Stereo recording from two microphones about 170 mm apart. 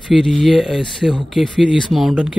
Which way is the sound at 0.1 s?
Centre (ahead or behind).